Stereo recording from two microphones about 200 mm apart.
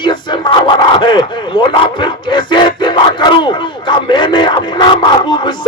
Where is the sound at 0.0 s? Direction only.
25° left (ahead or behind).